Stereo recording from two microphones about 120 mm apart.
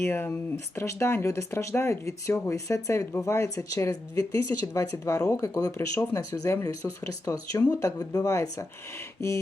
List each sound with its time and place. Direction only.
0.0 s speech: 20° left (ahead or behind)